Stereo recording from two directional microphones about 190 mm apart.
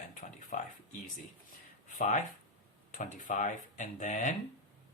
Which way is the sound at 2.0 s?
40° left (ahead or behind).